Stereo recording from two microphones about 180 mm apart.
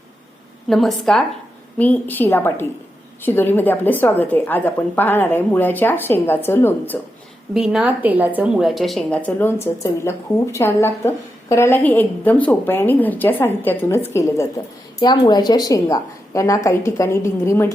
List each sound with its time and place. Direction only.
0.7 s a woman's voice: centre (ahead or behind)
7.5 s a woman's voice: centre (ahead or behind); by 17.7 s 15° left (ahead or behind)